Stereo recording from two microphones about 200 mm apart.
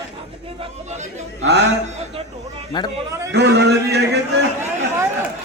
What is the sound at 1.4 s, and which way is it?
Speech, 65° right (ahead or behind).